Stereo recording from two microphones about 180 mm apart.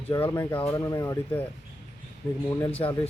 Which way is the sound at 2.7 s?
30° left (ahead or behind).